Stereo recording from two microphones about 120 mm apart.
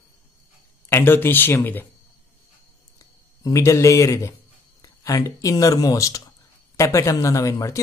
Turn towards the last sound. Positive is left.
turn(degrees=25)  # may be behind; listen again after turning